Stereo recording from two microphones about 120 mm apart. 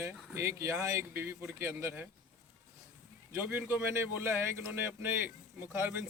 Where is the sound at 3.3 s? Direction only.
15° right (ahead or behind).